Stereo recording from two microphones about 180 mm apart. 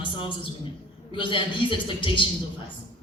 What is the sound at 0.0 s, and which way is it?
A man's voice, 25° left (ahead or behind).